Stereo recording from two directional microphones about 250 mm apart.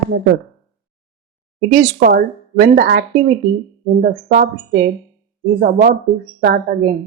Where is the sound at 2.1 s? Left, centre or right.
Right.